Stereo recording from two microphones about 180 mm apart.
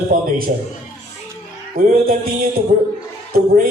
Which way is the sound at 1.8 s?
55° right (ahead or behind).